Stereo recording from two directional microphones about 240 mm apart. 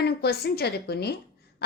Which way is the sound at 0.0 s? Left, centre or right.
Left.